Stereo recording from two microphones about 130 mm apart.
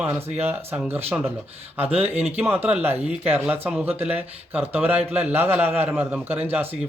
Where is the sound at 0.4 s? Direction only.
15° right (ahead or behind).